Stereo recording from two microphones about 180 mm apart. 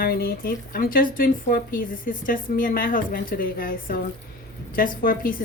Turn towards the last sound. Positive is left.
turn(degrees=50)  # may be behind; listen again after turning